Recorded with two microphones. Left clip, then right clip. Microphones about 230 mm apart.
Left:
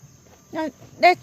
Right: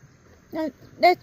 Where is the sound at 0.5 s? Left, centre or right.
Centre.